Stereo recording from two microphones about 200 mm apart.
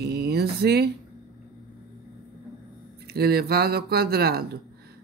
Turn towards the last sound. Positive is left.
turn(degrees=-50)  # may be behind; listen again after turning